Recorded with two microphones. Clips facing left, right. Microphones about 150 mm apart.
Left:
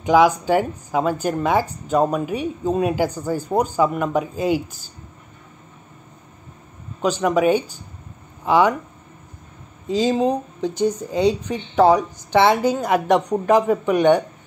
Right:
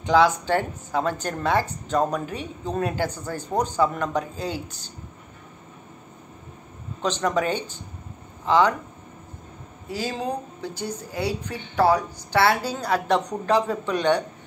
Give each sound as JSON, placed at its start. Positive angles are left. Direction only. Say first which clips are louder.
{"t": 0.0, "sound": "a woman's voice", "louder": "left 4 dB", "side_deg": 10}
{"t": 7.0, "sound": "a woman's voice", "louder": "left 5 dB", "side_deg": 10}
{"t": 9.8, "sound": "a woman's voice", "louder": "left 10 dB", "side_deg": 20}